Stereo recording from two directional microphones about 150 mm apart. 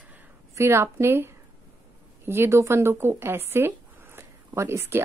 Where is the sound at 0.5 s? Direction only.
15° right (ahead or behind).